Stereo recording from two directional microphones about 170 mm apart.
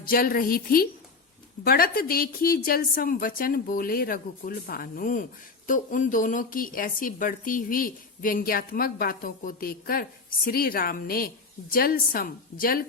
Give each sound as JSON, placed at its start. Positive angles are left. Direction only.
{"t": 0.0, "sound": "speech", "side_deg": 55}